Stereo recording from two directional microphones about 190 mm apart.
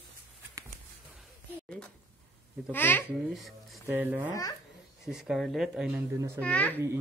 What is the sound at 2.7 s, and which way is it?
Babbling, 10° left (ahead or behind).